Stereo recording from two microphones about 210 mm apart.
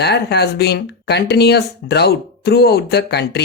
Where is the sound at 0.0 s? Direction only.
55° left (ahead or behind).